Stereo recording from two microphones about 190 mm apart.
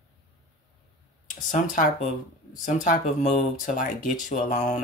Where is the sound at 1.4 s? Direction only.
45° left (ahead or behind).